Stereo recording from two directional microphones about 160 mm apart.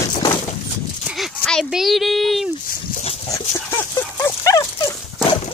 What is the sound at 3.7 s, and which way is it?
Dog, 15° left (ahead or behind).